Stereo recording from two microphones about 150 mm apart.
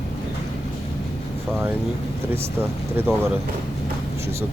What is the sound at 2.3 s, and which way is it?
Speech, 15° right (ahead or behind).